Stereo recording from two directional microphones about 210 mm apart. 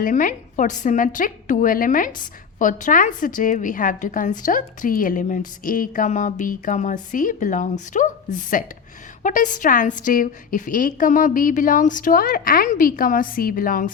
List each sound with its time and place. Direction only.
0.0 s a woman's voice: 40° left (ahead or behind)